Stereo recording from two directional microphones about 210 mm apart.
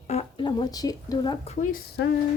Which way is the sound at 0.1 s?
25° left (ahead or behind).